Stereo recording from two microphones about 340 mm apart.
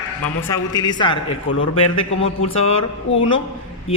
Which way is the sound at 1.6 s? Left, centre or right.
Left.